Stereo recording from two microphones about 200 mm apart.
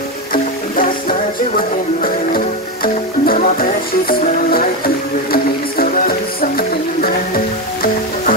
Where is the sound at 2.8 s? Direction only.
45° left (ahead or behind).